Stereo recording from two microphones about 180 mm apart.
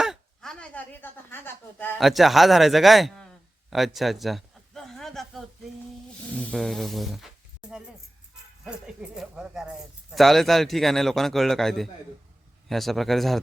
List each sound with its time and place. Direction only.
0.0 s speech: centre (ahead or behind)
2.0 s speech: centre (ahead or behind)
3.7 s a sound: centre (ahead or behind)
6.3 s speech: 5° left (ahead or behind)
8.6 s speech: 5° right (ahead or behind)